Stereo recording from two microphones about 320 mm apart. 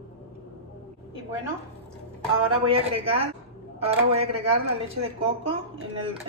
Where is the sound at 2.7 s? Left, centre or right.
Centre.